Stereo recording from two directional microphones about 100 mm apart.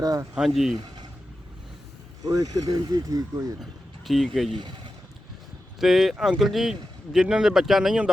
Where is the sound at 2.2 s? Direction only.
35° right (ahead or behind).